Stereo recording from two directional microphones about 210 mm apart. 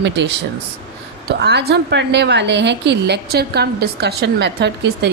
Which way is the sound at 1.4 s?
55° right (ahead or behind).